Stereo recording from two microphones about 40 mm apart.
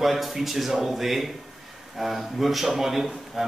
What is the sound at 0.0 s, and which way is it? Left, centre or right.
A man's voice, centre.